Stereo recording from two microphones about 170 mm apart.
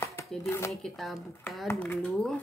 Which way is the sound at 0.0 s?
15° left (ahead or behind).